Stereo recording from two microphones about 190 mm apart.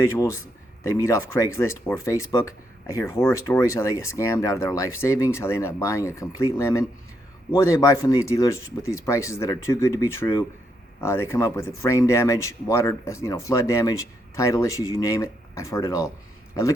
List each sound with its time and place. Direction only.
0.0 s speech: 15° left (ahead or behind)